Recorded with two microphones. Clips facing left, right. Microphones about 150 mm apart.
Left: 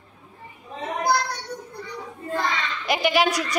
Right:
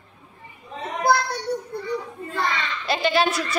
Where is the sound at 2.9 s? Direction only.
15° left (ahead or behind).